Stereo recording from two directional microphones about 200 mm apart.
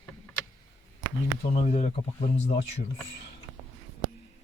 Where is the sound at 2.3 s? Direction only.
60° left (ahead or behind).